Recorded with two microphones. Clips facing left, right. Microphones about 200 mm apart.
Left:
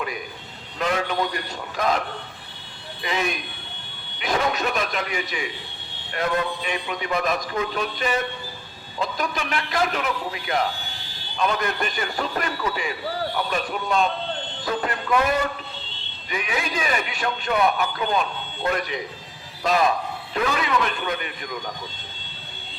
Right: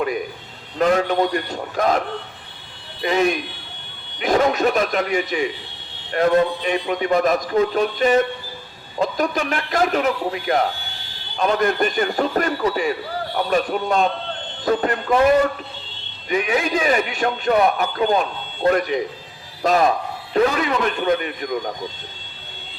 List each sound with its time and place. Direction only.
0.8 s a man's voice: 45° right (ahead or behind)
3.0 s a man's voice: 40° right (ahead or behind)
14.8 s speech: 30° right (ahead or behind)
16.3 s a man's voice: 40° right (ahead or behind)
20.3 s a man's voice: 40° right (ahead or behind)